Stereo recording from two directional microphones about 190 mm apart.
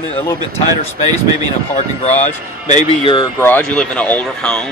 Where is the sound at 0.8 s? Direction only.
35° left (ahead or behind).